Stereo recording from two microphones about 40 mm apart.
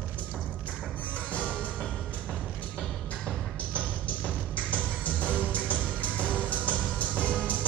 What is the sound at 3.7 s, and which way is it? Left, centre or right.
Music, left.